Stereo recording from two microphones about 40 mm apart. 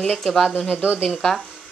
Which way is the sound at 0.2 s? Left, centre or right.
Centre.